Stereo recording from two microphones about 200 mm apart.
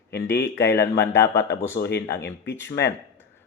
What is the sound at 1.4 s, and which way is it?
Speech, 60° left (ahead or behind).